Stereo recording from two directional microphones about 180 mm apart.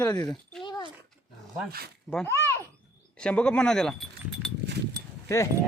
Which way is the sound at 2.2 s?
15° left (ahead or behind).